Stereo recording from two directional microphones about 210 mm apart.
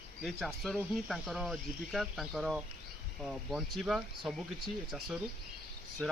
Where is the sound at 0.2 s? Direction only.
Centre (ahead or behind).